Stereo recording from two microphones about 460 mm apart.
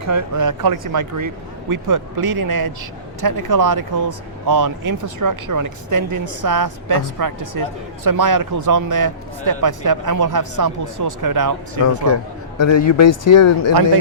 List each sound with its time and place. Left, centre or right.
0.0 s speech: right
12.0 s a man's voice: left